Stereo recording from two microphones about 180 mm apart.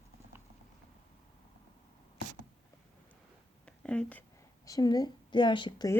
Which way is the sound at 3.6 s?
5° left (ahead or behind).